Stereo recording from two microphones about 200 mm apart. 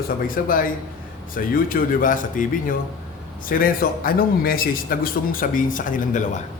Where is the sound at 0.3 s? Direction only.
45° left (ahead or behind).